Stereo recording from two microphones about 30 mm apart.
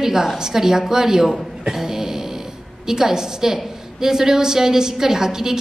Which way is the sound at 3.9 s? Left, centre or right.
Centre.